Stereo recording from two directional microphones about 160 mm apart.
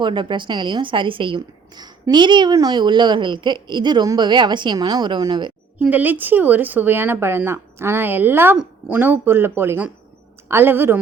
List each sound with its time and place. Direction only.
0.0 s a woman's voice: 30° right (ahead or behind)
5.8 s speech: 10° right (ahead or behind)